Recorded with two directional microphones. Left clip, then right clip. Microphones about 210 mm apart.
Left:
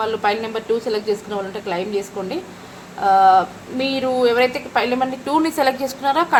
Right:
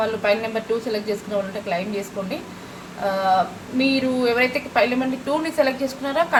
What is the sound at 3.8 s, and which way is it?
A woman's voice, 40° left (ahead or behind).